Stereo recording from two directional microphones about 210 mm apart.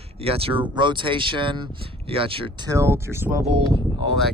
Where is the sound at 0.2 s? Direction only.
25° right (ahead or behind); by 3.3 s 10° right (ahead or behind).